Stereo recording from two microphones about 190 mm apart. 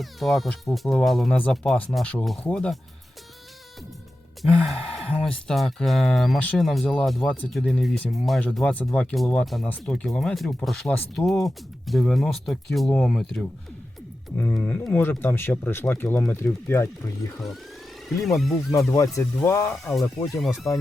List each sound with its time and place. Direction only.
0.0 s speech: centre (ahead or behind)
4.6 s speech: centre (ahead or behind)
18.2 s speech: centre (ahead or behind)
18.9 s speech: 15° left (ahead or behind)
19.9 s speech: centre (ahead or behind)
20.7 s speech: 15° left (ahead or behind)